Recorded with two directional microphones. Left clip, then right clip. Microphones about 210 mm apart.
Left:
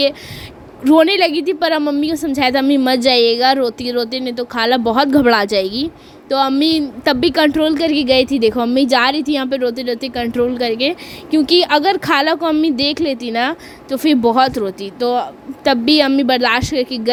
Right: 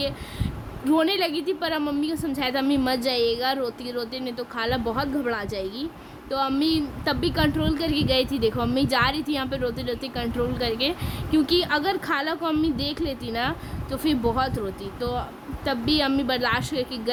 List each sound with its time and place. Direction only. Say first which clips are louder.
0.9 s a woman's voice: left 11 dB; 30° left (ahead or behind)